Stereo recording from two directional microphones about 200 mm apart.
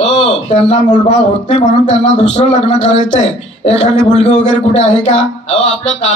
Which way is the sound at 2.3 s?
30° left (ahead or behind).